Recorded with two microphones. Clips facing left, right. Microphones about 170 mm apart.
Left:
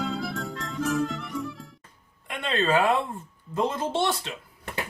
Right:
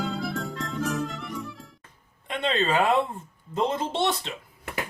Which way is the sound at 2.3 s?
20° right (ahead or behind).